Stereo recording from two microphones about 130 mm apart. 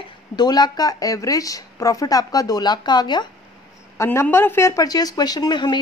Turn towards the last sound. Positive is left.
turn(degrees=35)  # may be behind; listen again after turning